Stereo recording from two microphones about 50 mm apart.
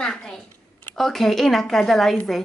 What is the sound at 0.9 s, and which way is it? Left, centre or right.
A woman's voice, centre.